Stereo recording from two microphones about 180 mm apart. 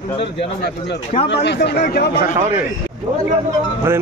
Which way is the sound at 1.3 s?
70° left (ahead or behind).